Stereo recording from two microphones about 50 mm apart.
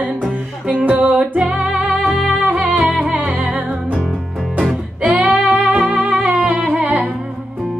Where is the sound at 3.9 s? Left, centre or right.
Centre.